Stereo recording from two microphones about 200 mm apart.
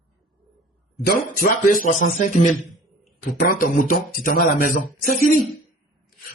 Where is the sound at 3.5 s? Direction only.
45° left (ahead or behind).